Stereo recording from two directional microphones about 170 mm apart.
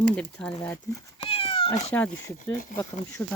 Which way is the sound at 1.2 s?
35° left (ahead or behind).